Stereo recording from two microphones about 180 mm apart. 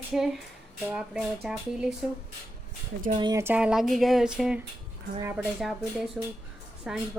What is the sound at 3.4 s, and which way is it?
Speech, 5° right (ahead or behind).